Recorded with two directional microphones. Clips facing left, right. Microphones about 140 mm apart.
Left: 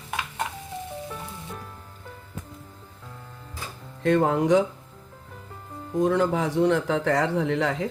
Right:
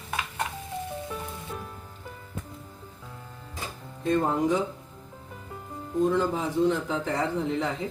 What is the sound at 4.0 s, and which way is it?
Speech, 80° left.